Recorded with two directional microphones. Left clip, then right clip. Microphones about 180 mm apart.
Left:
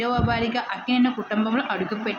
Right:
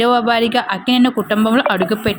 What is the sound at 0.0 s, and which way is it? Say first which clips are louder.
A woman's voice: right 10 dB; 45° right (ahead or behind).